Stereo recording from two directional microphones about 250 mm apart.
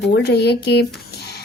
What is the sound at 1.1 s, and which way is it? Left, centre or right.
Music, left.